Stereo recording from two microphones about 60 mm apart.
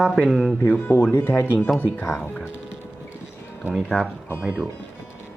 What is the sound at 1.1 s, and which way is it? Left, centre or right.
Speech, left.